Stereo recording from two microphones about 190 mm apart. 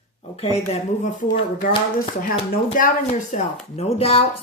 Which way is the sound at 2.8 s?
45° left (ahead or behind).